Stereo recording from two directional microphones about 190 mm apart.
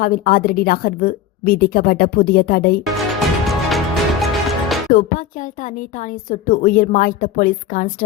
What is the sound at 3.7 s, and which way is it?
Music, centre (ahead or behind).